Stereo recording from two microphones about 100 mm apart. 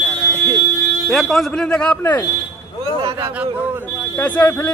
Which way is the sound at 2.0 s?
15° left (ahead or behind).